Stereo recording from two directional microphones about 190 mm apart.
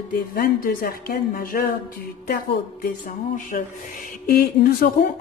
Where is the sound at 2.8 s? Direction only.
45° left (ahead or behind).